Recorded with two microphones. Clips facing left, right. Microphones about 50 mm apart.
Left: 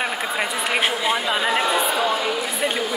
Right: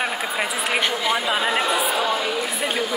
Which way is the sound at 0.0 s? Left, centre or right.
Centre.